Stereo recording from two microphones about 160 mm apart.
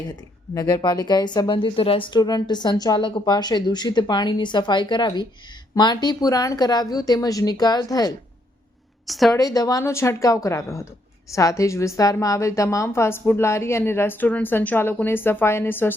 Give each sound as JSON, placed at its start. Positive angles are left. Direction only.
{"t": 0.5, "sound": "a woman's voice", "side_deg": 20}
{"t": 9.0, "sound": "a woman's voice", "side_deg": 0}
{"t": 9.3, "sound": "a woman's voice", "side_deg": 25}